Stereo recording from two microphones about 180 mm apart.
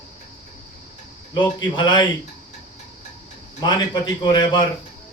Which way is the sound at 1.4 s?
25° left (ahead or behind).